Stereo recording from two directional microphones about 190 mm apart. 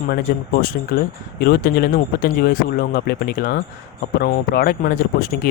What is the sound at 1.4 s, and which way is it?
Speech, 55° left (ahead or behind).